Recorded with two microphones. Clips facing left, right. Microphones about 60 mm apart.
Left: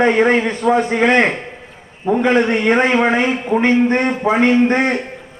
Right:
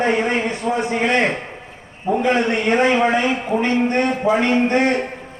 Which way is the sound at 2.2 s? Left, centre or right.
Left.